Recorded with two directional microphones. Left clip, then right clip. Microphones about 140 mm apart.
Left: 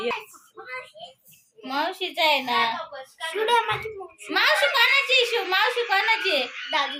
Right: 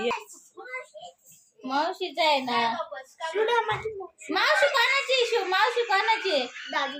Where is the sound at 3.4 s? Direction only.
35° right (ahead or behind).